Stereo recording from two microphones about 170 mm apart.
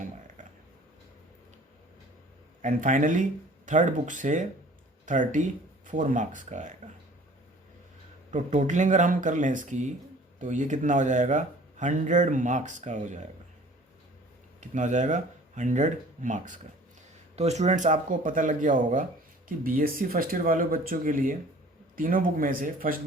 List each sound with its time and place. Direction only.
2.6 s speech: 50° right (ahead or behind)
8.3 s speech: 45° right (ahead or behind)
14.6 s speech: 45° right (ahead or behind)